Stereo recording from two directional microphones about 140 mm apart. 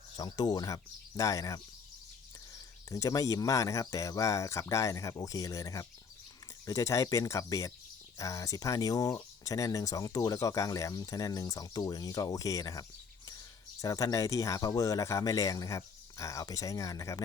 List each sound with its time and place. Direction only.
0.2 s speech: 30° left (ahead or behind)
2.9 s speech: 25° left (ahead or behind)
13.8 s speech: 25° left (ahead or behind)